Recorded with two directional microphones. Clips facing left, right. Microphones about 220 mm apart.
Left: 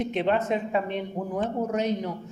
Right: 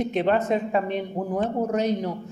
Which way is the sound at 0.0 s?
40° right (ahead or behind).